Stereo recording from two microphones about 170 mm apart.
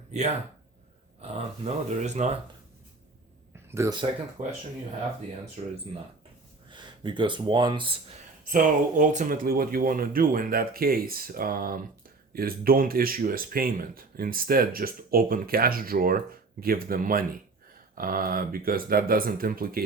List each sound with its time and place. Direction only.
0.1 s speech: 40° right (ahead or behind)
3.7 s speech: 15° right (ahead or behind)
4.4 s speech: 45° right (ahead or behind)
5.6 s speech: 40° right (ahead or behind)
6.7 s speech: 30° right (ahead or behind)
8.4 s speech: 50° right (ahead or behind)